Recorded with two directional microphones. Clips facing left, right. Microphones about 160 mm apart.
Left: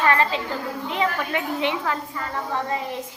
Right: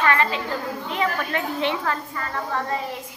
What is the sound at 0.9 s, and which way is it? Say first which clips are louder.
A woman's voice: left 1 dB; 15° left (ahead or behind).